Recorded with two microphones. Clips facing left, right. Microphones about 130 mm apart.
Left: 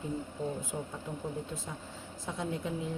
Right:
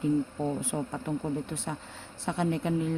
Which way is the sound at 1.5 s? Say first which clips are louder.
Right 5 dB; 75° right (ahead or behind).